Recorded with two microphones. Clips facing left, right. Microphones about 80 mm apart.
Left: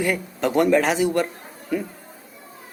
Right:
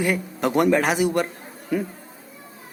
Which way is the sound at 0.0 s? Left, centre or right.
Centre.